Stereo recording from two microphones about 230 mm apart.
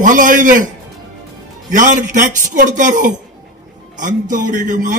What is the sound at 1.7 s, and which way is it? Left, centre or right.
A man's voice, right.